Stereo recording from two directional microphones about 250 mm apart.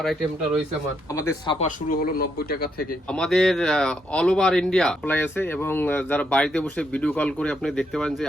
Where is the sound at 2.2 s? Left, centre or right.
Left.